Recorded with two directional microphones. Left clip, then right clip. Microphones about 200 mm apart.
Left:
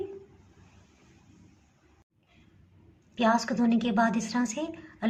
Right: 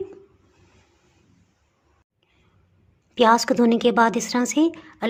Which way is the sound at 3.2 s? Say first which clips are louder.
Right 9 dB; 55° right (ahead or behind).